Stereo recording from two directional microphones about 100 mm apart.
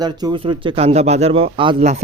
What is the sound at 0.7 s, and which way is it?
A man's voice, 90° right.